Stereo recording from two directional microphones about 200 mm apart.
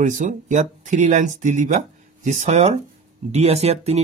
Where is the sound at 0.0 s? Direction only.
40° right (ahead or behind).